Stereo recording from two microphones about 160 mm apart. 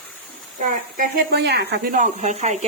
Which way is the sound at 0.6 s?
65° right (ahead or behind).